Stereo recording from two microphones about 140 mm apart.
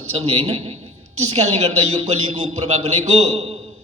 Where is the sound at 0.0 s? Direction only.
50° right (ahead or behind).